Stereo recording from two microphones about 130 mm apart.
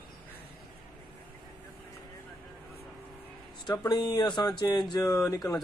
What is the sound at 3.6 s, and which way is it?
Speech, 30° left (ahead or behind).